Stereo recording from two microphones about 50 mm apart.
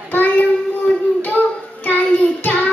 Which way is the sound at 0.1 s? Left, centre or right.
Left.